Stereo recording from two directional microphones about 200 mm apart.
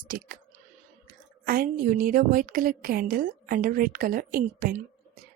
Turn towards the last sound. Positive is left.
turn(degrees=-45)  # may be behind; listen again after turning